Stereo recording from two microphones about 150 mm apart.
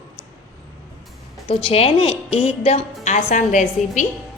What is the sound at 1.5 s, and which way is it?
A woman's voice, 40° left (ahead or behind).